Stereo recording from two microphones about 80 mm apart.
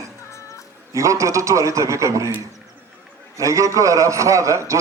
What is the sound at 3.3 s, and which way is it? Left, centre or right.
A man's voice, right.